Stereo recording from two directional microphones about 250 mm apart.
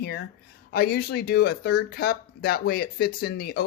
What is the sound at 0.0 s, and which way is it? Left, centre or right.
Speech, left.